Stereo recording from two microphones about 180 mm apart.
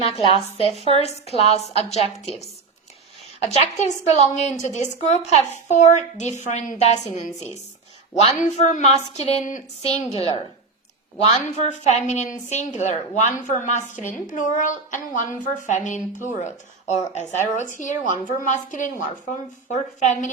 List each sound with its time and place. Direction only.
0.0 s a woman's voice: 30° left (ahead or behind)
17.1 s a woman's voice: 40° left (ahead or behind)